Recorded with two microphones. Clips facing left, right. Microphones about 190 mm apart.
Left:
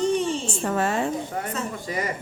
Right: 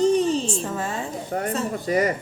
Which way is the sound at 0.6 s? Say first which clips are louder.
Left 4 dB; 70° left (ahead or behind).